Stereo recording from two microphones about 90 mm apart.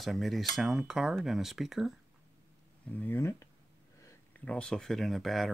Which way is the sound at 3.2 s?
35° left (ahead or behind).